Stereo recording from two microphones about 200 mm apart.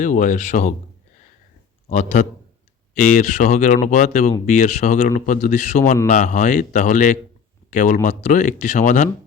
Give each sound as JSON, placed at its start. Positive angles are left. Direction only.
{"t": 0.0, "sound": "speech", "side_deg": 40}
{"t": 1.9, "sound": "speech", "side_deg": 35}